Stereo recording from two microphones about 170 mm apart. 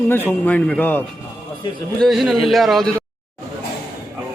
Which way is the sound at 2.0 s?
Centre (ahead or behind).